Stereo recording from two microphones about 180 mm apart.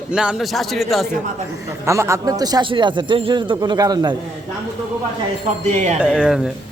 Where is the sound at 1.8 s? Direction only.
15° right (ahead or behind).